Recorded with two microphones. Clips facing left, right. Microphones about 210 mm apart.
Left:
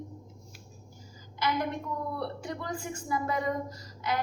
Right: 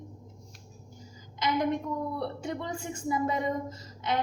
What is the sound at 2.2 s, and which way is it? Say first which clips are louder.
A woman's voice: right 2 dB; 25° right (ahead or behind).